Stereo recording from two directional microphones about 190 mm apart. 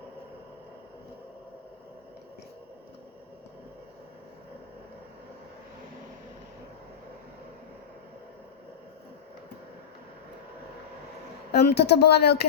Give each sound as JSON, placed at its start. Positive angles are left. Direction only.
{"t": 11.5, "sound": "speech", "side_deg": 60}